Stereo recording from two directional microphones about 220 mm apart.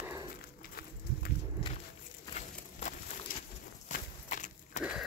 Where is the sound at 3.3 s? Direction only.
40° left (ahead or behind).